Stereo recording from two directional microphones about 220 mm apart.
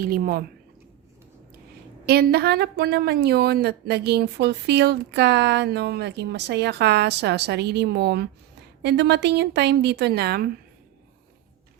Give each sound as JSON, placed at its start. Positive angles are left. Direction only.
{"t": 0.0, "sound": "a woman's voice", "side_deg": -40}
{"t": 2.0, "sound": "a woman's voice", "side_deg": -45}